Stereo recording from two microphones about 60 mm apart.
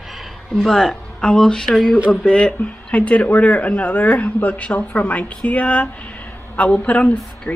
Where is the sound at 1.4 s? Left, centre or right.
Centre.